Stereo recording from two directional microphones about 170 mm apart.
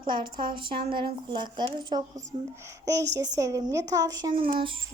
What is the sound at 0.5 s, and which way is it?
A child's voice, 30° right (ahead or behind).